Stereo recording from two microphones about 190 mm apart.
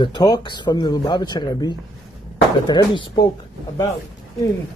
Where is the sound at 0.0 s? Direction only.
20° left (ahead or behind).